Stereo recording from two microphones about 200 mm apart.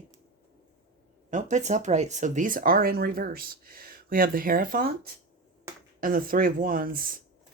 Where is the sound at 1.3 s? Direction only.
35° right (ahead or behind).